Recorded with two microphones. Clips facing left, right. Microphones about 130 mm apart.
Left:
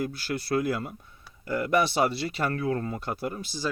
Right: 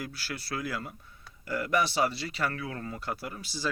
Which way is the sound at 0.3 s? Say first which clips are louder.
Left 8 dB; 50° left (ahead or behind).